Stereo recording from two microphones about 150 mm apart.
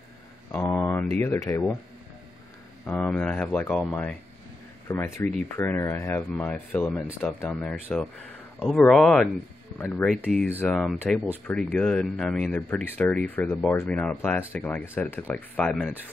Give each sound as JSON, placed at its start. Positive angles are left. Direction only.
{"t": 0.6, "sound": "speech", "side_deg": 15}
{"t": 2.9, "sound": "speech", "side_deg": 10}
{"t": 7.4, "sound": "speech", "side_deg": 0}
{"t": 9.8, "sound": "speech", "side_deg": 15}